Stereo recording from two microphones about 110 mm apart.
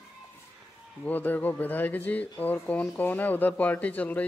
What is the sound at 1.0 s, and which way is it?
Speech, 15° left (ahead or behind).